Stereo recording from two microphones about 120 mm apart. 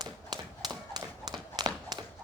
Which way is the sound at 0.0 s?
35° right (ahead or behind).